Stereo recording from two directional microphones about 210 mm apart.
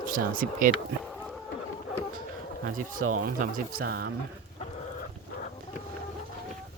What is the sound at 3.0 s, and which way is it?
Speech, 90° right.